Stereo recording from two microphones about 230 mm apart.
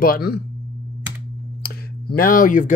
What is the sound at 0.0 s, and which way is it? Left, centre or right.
Speech, left.